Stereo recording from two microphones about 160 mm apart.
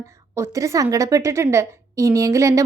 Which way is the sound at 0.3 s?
20° right (ahead or behind).